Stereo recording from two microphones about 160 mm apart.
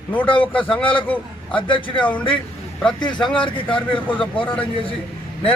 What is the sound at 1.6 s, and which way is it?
Speech, 30° left (ahead or behind).